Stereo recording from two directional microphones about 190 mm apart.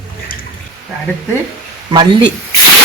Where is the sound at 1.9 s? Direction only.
25° right (ahead or behind).